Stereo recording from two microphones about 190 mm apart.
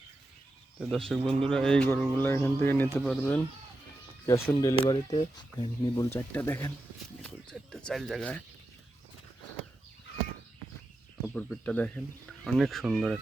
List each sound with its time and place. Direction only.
0.8 s speech: centre (ahead or behind)
4.3 s speech: 15° left (ahead or behind)
6.1 s speech: 10° left (ahead or behind)
7.2 s speech: 5° left (ahead or behind)
11.3 s speech: 5° left (ahead or behind)